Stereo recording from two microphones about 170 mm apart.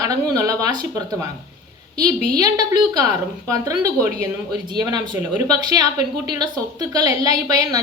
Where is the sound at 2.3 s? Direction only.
20° right (ahead or behind).